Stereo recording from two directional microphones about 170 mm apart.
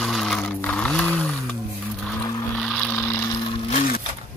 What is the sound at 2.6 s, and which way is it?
Mechanisms, centre (ahead or behind).